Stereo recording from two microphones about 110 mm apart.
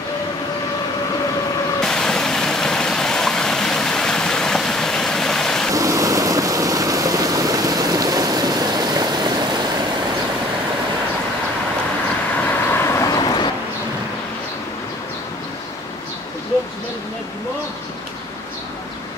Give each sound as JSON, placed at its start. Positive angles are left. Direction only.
{"t": 1.8, "sound": "a sound", "side_deg": 5}
{"t": 5.7, "sound": "vehicle", "side_deg": -30}
{"t": 12.4, "sound": "vehicle", "side_deg": 20}